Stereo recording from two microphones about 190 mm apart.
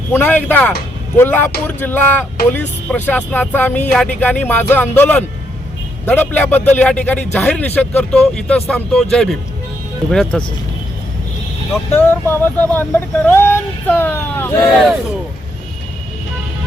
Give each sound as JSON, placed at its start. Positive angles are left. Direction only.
{"t": 0.1, "sound": "speech", "side_deg": 10}
{"t": 11.9, "sound": "speech", "side_deg": 10}
{"t": 14.7, "sound": "speech", "side_deg": 0}